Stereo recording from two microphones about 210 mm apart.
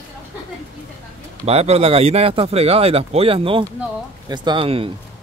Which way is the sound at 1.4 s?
30° right (ahead or behind).